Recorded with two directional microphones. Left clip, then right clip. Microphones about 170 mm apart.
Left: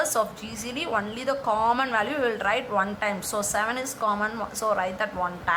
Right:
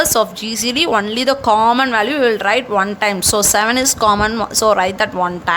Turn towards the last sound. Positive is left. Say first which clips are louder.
# right 11 dB
turn(degrees=-50)  # may be behind; listen again after turning